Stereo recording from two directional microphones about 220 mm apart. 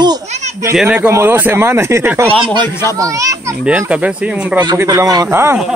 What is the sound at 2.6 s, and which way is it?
Speech, 10° left (ahead or behind).